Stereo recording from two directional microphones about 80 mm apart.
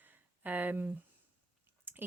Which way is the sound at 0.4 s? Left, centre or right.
Right.